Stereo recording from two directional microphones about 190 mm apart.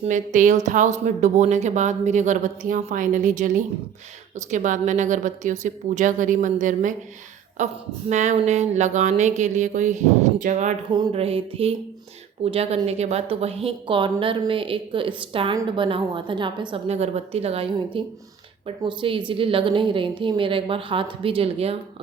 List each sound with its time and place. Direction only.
0.0 s a woman's voice: 40° right (ahead or behind)
10.9 s a woman's voice: 25° right (ahead or behind)